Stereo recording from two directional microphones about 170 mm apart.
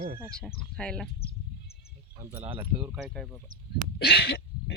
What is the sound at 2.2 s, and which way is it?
Speech, 10° right (ahead or behind).